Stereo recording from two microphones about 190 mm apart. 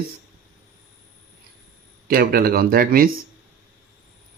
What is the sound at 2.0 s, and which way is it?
Speech, 50° right (ahead or behind).